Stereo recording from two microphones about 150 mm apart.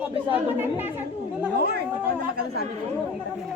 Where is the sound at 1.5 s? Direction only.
90° right.